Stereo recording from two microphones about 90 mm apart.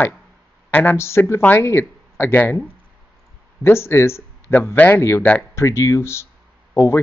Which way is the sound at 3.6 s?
30° left (ahead or behind).